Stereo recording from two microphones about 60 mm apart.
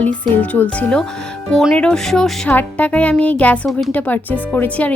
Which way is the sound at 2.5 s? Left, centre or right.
Left.